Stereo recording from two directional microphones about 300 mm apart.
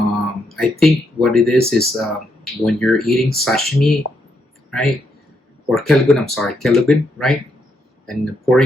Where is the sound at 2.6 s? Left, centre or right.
Centre.